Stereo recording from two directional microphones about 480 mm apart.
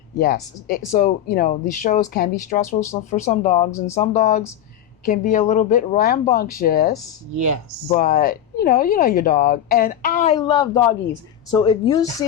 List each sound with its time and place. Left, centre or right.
0.2 s speech: centre